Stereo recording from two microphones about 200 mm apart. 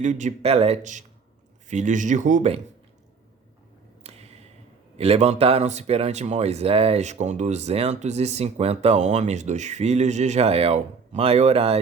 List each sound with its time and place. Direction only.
0.0 s speech: 35° right (ahead or behind)
4.0 s a sound: 30° right (ahead or behind)
4.9 s speech: 30° right (ahead or behind)